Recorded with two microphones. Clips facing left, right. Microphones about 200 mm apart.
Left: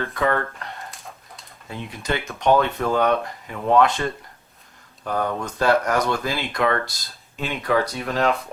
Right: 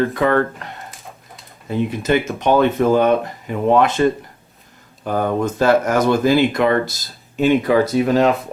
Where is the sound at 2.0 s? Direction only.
5° right (ahead or behind).